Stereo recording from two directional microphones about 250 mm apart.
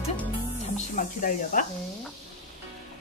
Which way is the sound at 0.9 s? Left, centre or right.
Left.